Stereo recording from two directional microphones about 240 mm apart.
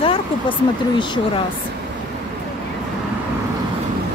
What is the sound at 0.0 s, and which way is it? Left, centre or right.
Speech, left.